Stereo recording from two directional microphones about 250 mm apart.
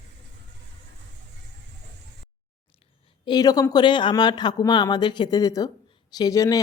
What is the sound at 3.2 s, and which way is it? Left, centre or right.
Speech, centre.